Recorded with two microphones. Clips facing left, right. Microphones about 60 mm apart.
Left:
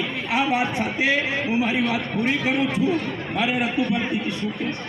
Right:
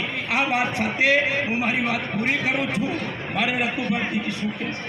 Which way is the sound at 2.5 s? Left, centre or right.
Right.